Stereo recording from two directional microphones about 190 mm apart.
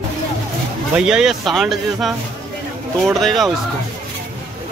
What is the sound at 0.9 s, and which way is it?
Speech, 5° right (ahead or behind).